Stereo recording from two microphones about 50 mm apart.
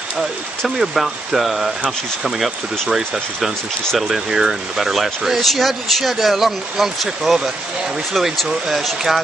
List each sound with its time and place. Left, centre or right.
0.7 s speech: centre
8.5 s speech: centre